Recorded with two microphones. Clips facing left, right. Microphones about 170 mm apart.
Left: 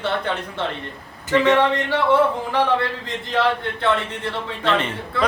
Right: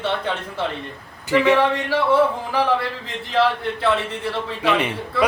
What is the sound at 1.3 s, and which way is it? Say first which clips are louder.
Speech: even; 10° right (ahead or behind).